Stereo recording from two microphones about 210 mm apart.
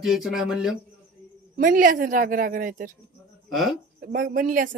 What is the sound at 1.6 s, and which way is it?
A woman's voice, 40° right (ahead or behind).